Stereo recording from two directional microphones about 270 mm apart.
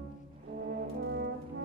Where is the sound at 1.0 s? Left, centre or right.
Right.